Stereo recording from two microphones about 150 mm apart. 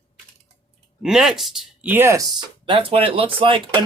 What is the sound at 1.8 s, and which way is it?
Speech, 15° right (ahead or behind).